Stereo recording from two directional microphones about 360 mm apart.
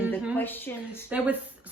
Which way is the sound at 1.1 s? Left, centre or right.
Centre.